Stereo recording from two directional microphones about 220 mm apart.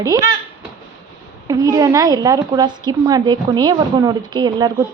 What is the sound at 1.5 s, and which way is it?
A woman's voice, 15° right (ahead or behind).